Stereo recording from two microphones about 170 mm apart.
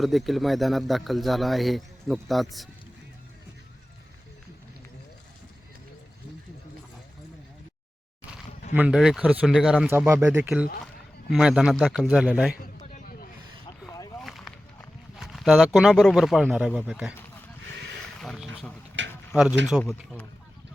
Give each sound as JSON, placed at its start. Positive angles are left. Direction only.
{"t": 0.0, "sound": "speech", "side_deg": 0}
{"t": 8.7, "sound": "speech", "side_deg": -5}
{"t": 10.1, "sound": "speech", "side_deg": -15}
{"t": 11.3, "sound": "speech", "side_deg": -5}
{"t": 12.8, "sound": "a sound", "side_deg": 50}
{"t": 14.2, "sound": "run", "side_deg": 0}
{"t": 15.1, "sound": "speech", "side_deg": 0}
{"t": 18.2, "sound": "a sound", "side_deg": 0}
{"t": 19.0, "sound": "a sound", "side_deg": -90}
{"t": 19.8, "sound": "speech", "side_deg": 5}